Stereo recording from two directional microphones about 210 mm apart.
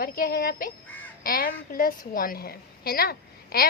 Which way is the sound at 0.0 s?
45° left (ahead or behind).